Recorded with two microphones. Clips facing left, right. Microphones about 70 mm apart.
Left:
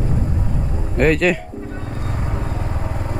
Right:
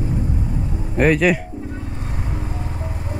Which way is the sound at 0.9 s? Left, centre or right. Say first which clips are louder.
Even; centre.